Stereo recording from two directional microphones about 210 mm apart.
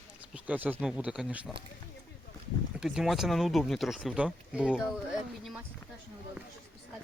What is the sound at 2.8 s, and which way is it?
Speech, centre (ahead or behind).